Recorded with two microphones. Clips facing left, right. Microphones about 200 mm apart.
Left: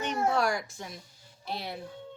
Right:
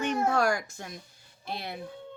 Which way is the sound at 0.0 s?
50° right (ahead or behind).